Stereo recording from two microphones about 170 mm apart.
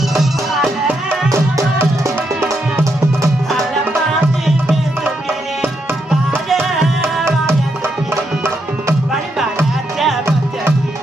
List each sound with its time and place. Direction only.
0.1 s music: centre (ahead or behind)
1.3 s music: 20° right (ahead or behind)
5.6 s music: 5° right (ahead or behind)
7.0 s tabla: 15° right (ahead or behind)